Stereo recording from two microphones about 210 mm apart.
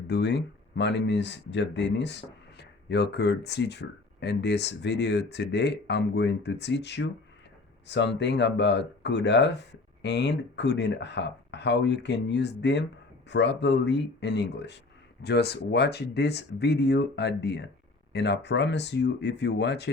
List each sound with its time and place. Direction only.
0.1 s speech: 55° left (ahead or behind)